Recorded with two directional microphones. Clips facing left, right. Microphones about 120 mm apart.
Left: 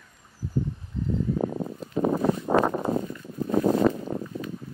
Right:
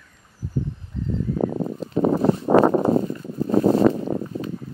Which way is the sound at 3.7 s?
75° right (ahead or behind).